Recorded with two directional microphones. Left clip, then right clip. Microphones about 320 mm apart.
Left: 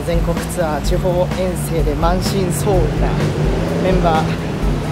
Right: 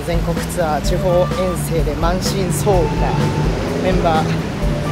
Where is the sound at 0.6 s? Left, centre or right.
Centre.